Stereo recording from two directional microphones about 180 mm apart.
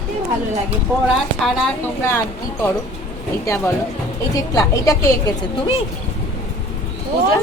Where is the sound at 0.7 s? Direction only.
Centre (ahead or behind).